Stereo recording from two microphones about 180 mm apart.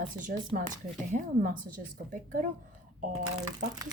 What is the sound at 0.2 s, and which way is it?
A woman's voice, 45° right (ahead or behind).